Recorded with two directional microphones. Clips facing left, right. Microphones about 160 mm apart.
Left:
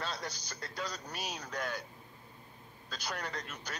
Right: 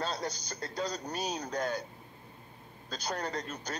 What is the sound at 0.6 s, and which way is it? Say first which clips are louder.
Speech: right 5 dB; 30° right (ahead or behind).